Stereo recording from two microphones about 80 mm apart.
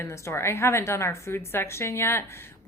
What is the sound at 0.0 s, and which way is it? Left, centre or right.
A woman's voice, left.